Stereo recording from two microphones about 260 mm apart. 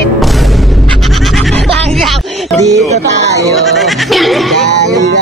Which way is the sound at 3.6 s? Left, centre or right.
Centre.